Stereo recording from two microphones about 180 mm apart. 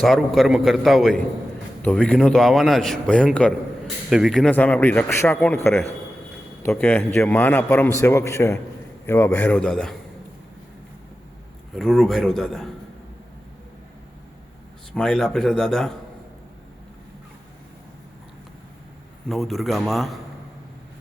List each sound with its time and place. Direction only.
0.0 s a man's voice: centre (ahead or behind)
6.7 s speech: 5° left (ahead or behind)
11.7 s a man's voice: centre (ahead or behind)
14.9 s a man's voice: 5° left (ahead or behind)
19.3 s a man's voice: centre (ahead or behind)